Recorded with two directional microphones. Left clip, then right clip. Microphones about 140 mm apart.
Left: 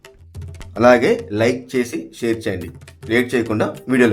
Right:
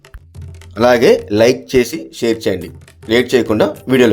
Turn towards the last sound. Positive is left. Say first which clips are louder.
# right 5 dB
turn(degrees=-30)  # may be behind; listen again after turning